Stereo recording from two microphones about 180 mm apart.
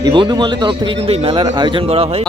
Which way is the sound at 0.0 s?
25° right (ahead or behind).